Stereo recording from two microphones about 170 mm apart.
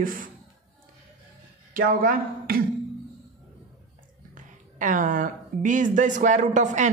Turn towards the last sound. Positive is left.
turn(degrees=-45)  # may be behind; listen again after turning